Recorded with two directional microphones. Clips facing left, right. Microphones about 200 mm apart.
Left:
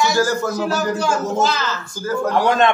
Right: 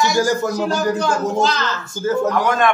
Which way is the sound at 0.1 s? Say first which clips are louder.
Right 1 dB; 15° right (ahead or behind).